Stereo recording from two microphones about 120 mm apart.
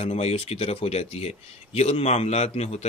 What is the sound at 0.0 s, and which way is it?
Speech, 60° left (ahead or behind).